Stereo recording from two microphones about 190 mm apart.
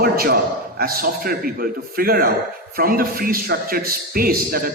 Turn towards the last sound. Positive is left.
turn(degrees=-50)  # may be behind; listen again after turning